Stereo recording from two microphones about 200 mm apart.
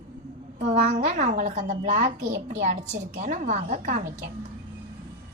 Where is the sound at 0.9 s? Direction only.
35° right (ahead or behind).